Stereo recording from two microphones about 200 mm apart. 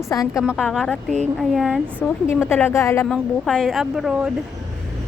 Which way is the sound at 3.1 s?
5° left (ahead or behind).